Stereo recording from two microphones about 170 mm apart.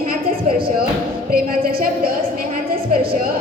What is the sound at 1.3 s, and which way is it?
Speech, 60° right (ahead or behind).